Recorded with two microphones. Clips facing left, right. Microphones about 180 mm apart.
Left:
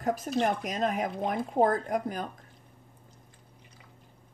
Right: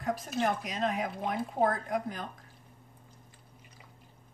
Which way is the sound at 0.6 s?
45° left (ahead or behind).